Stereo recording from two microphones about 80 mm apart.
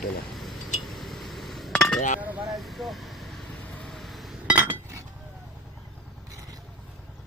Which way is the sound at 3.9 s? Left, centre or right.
Centre.